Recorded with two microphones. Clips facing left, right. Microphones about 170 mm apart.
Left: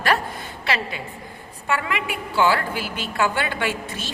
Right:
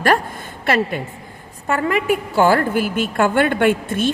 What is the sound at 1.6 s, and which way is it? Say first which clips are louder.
A woman's voice: right 7 dB; 40° right (ahead or behind).